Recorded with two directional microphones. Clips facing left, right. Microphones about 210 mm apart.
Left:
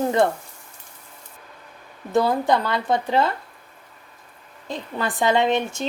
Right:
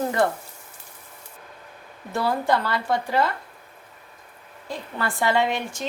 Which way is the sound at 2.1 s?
20° left (ahead or behind).